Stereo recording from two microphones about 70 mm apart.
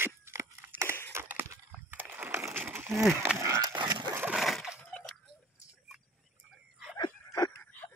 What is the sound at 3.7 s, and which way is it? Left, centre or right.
Dog, right.